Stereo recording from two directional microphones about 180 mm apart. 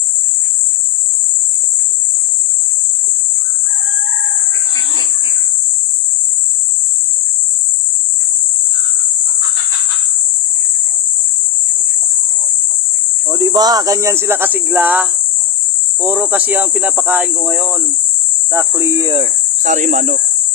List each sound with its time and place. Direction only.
13.3 s speech: 20° right (ahead or behind)
19.1 s speech: 45° right (ahead or behind)